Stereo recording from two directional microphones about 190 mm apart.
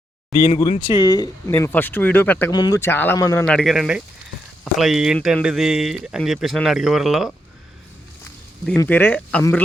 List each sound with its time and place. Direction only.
0.5 s speech: 30° left (ahead or behind); by 2.5 s 10° left (ahead or behind)
2.5 s speech: 20° left (ahead or behind)
3.4 s speech: 5° left (ahead or behind)
8.8 s speech: 10° left (ahead or behind)